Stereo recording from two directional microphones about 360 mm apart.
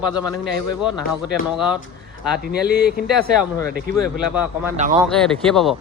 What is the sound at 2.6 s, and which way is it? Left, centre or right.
Speech, right.